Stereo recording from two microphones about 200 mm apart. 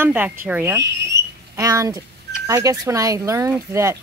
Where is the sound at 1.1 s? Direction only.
60° right (ahead or behind).